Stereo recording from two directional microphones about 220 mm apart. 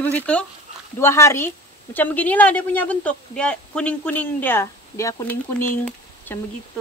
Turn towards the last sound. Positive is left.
turn(degrees=10)  # may be behind; listen again after turning